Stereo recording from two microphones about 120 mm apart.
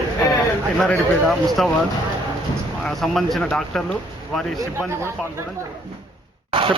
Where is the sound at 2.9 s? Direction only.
Centre (ahead or behind).